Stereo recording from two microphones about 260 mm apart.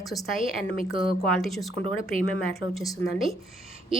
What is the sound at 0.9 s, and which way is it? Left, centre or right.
Speech, centre.